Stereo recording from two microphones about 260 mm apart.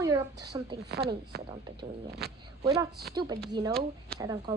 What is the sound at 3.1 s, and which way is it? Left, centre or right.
A woman's voice, centre.